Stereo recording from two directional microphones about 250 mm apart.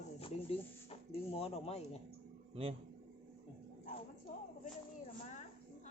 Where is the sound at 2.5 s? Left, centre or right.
Right.